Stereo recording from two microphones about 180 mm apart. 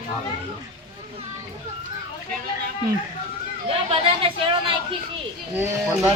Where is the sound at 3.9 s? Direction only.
30° right (ahead or behind).